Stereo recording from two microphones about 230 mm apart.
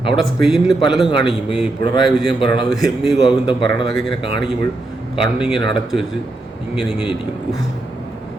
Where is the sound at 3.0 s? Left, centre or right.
Centre.